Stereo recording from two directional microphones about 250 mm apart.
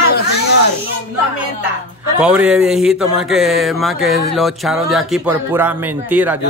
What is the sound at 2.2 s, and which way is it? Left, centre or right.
A man's voice, centre.